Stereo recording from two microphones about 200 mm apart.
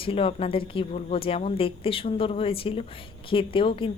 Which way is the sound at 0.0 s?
25° left (ahead or behind).